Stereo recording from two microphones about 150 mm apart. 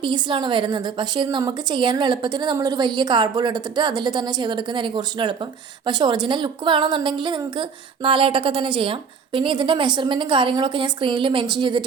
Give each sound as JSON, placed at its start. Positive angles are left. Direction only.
{"t": 0.0, "sound": "a woman's voice", "side_deg": -30}